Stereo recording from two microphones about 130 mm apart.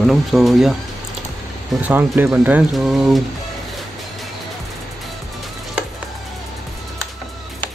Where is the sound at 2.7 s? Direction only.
Centre (ahead or behind).